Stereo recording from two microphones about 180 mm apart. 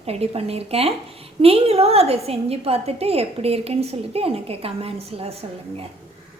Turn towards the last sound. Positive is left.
turn(degrees=-35)  # may be behind; listen again after turning